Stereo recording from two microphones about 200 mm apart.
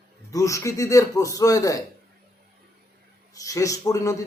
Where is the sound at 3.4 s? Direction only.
15° left (ahead or behind).